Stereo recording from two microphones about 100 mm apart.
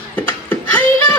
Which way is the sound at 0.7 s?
20° left (ahead or behind).